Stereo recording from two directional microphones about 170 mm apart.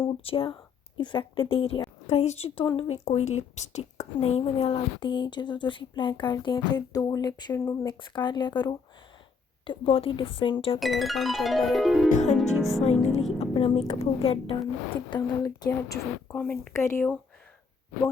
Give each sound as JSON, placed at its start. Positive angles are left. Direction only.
{"t": 0.0, "sound": "a woman's voice", "side_deg": 30}
{"t": 7.9, "sound": "a woman's voice", "side_deg": 25}
{"t": 10.8, "sound": "music", "side_deg": 0}
{"t": 12.0, "sound": "speech", "side_deg": 45}
{"t": 12.5, "sound": "music", "side_deg": 0}
{"t": 12.8, "sound": "a woman's voice", "side_deg": 40}
{"t": 15.1, "sound": "a woman's voice", "side_deg": 20}
{"t": 16.4, "sound": "music", "side_deg": 5}
{"t": 16.7, "sound": "speech", "side_deg": 15}